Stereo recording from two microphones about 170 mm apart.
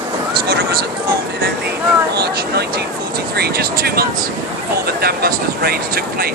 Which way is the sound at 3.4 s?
65° right (ahead or behind).